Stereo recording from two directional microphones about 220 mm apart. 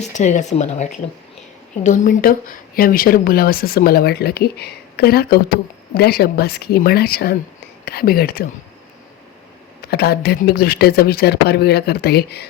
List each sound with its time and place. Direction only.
0.1 s speech: 35° left (ahead or behind)
9.8 s speech: 45° left (ahead or behind)